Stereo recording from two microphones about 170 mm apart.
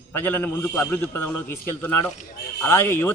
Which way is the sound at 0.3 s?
10° left (ahead or behind).